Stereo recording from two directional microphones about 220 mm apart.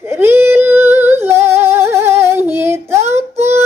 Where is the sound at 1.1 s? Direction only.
10° right (ahead or behind).